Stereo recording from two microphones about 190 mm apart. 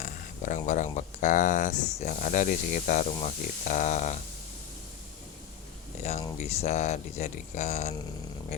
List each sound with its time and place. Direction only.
0.0 s speech: 40° left (ahead or behind)
6.0 s speech: 35° left (ahead or behind)